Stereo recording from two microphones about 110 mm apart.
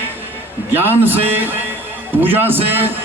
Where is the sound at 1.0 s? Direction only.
20° right (ahead or behind).